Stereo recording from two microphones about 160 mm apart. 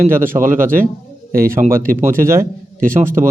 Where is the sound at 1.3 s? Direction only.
65° right (ahead or behind).